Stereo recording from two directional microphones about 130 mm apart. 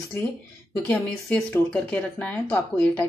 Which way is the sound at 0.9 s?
5° left (ahead or behind).